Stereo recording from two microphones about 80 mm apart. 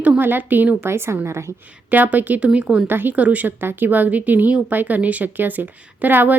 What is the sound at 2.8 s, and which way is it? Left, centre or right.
A woman's voice, right.